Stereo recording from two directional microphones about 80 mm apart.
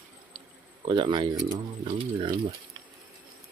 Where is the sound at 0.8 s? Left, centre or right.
Right.